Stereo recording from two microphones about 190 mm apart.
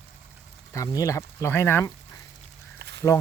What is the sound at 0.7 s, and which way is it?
Speech, 15° left (ahead or behind).